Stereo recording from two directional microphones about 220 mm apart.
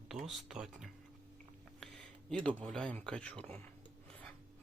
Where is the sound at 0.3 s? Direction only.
Centre (ahead or behind).